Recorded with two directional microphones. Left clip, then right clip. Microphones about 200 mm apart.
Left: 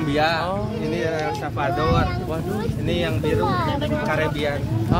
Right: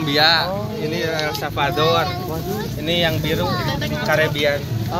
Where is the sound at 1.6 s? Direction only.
20° right (ahead or behind).